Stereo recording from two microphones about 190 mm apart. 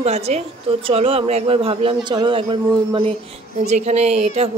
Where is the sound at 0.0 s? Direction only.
35° right (ahead or behind).